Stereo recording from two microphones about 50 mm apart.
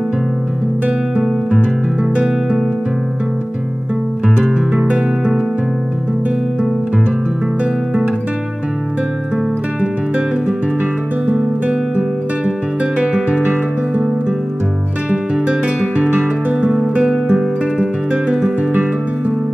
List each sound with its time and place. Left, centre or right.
4.7 s music: right
12.4 s music: right
16.6 s music: centre